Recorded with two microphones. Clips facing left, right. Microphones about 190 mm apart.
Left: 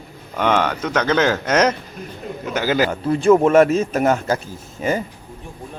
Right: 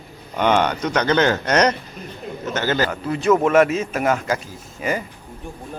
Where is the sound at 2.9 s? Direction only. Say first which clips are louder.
Left 6 dB; 30° left (ahead or behind).